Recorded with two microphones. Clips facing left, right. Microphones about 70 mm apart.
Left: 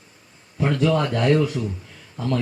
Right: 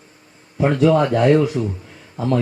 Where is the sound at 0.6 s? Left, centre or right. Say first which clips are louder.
Right 5 dB; centre.